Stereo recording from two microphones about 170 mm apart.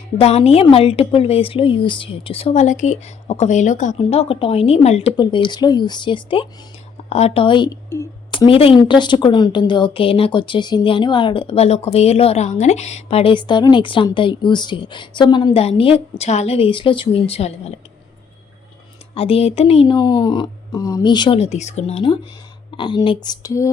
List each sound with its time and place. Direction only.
0.2 s a woman's voice: 35° left (ahead or behind)
19.1 s a woman's voice: 35° left (ahead or behind); by 23.7 s 20° left (ahead or behind)